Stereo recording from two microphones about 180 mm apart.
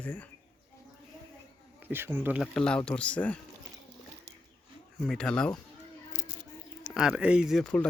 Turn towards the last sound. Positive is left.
turn(degrees=5)  # may be behind; listen again after turning